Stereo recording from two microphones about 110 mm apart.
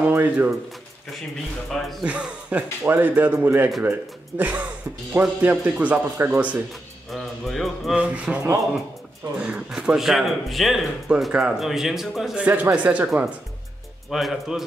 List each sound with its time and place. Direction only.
0.0 s speech: 15° right (ahead or behind)
1.7 s speech: centre (ahead or behind)
2.0 s speech: 10° right (ahead or behind)
7.1 s speech: centre (ahead or behind)
8.0 s speech: 10° right (ahead or behind)
9.4 s speech: 10° right (ahead or behind)